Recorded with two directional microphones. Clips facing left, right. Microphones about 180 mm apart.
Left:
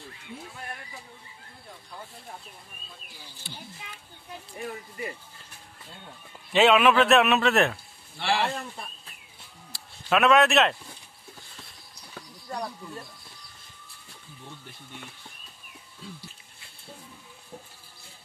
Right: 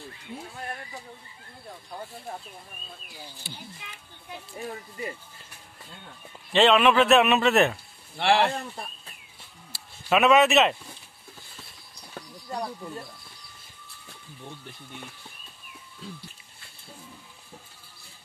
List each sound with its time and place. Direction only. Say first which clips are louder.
3.4 s a man's voice: left 2 dB; 5° right (ahead or behind)
6.5 s a man's voice: even; 5° left (ahead or behind)
8.2 s speech: right 5 dB; 60° right (ahead or behind)
9.7 s a sound: right 1 dB; centre (ahead or behind)